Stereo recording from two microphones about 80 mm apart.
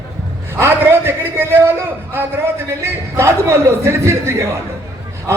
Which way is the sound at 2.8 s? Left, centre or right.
Right.